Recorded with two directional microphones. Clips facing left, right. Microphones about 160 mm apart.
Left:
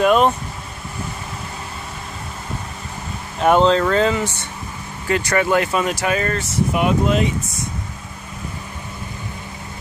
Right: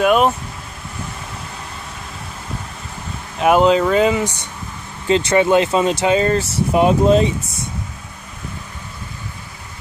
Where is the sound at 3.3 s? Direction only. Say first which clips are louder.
Right 1 dB; 5° right (ahead or behind); by 7.6 s 30° right (ahead or behind).